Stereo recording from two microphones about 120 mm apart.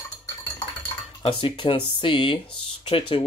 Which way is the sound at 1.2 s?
50° left (ahead or behind).